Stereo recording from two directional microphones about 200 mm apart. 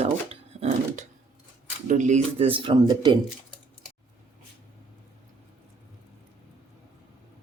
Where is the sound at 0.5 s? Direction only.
35° right (ahead or behind).